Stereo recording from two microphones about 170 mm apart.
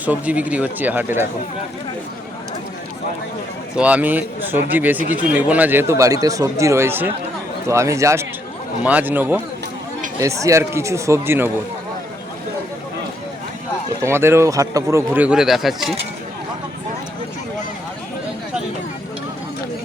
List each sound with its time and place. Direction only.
0.0 s speech: 10° right (ahead or behind)
3.8 s speech: 10° right (ahead or behind)
14.0 s speech: 15° right (ahead or behind)